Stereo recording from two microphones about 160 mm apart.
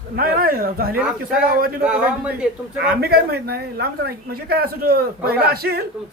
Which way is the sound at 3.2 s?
80° right.